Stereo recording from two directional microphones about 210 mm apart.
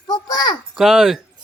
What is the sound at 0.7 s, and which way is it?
Speech, centre (ahead or behind).